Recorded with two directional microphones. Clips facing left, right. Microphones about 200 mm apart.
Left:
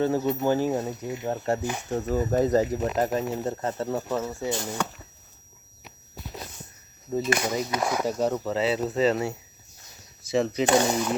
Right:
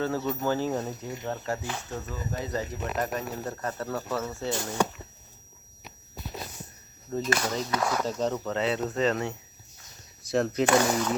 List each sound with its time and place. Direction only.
0.0 s speech: 20° left (ahead or behind)
1.2 s speech: 25° left (ahead or behind)
1.6 s speech: 15° left (ahead or behind)
2.0 s speech: 45° left (ahead or behind); by 4.7 s 15° left (ahead or behind)
7.1 s speech: 10° left (ahead or behind)
10.7 s speech: 20° left (ahead or behind)